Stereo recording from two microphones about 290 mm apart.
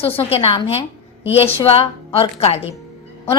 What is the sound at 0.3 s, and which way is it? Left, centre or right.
A woman's voice, left.